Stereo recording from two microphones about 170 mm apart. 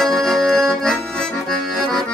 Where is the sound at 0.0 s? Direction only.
Centre (ahead or behind).